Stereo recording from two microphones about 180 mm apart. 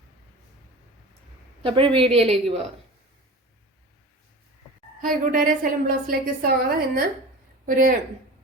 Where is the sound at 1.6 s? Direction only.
30° right (ahead or behind).